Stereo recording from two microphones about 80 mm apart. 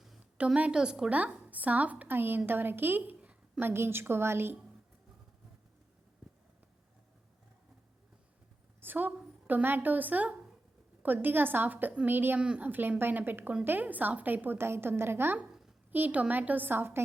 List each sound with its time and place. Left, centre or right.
0.3 s a woman's voice: centre
3.2 s a sound: centre
3.6 s a woman's voice: right
8.8 s a sound: right
9.5 s a woman's voice: right
12.4 s a woman's voice: centre